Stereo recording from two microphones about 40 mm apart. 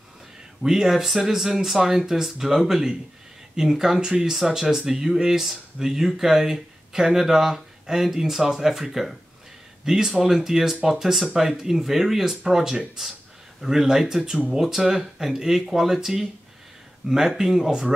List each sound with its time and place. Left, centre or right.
0.7 s speech: centre
4.0 s speech: right
4.3 s speech: centre
17.0 s speech: right
17.4 s speech: centre